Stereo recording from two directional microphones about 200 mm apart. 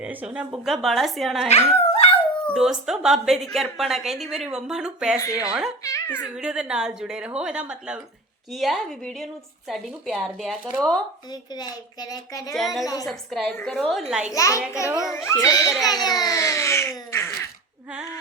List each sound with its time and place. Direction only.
0.0 s a woman's voice: 5° right (ahead or behind)
1.5 s speech: 30° left (ahead or behind)
2.6 s a woman's voice: 5° right (ahead or behind)
5.8 s speech: 15° left (ahead or behind)
6.2 s a woman's voice: 5° right (ahead or behind)
11.3 s a child's voice: 20° left (ahead or behind)
12.5 s a woman's voice: centre (ahead or behind)
12.8 s a child's voice: 20° left (ahead or behind)
13.1 s a woman's voice: centre (ahead or behind)
14.3 s a child's voice: 15° left (ahead or behind)
14.8 s a woman's voice: centre (ahead or behind)
15.1 s a child's voice: 15° left (ahead or behind)